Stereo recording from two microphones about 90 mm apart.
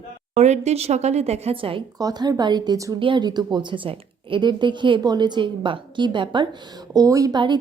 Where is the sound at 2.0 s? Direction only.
45° right (ahead or behind).